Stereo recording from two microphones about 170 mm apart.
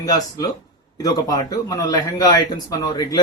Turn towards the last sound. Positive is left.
turn(degrees=25)  # may be behind; listen again after turning